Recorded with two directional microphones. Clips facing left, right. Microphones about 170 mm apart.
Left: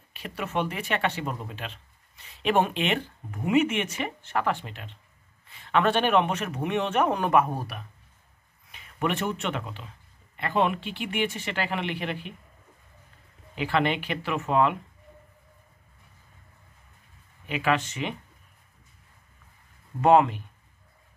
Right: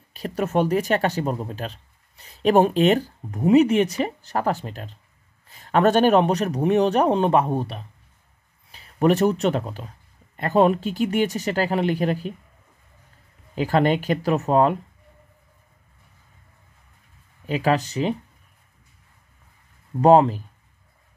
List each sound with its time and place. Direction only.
0.1 s speech: 40° right (ahead or behind)
13.6 s speech: 40° right (ahead or behind)
17.5 s speech: 40° right (ahead or behind)
20.0 s speech: 35° right (ahead or behind)